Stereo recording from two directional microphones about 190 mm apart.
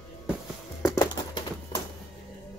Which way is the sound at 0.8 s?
20° left (ahead or behind).